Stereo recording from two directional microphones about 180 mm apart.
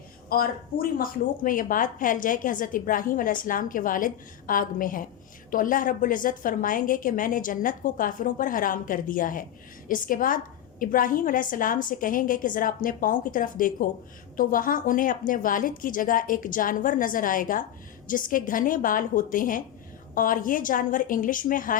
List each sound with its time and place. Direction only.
0.3 s a woman's voice: 55° left (ahead or behind)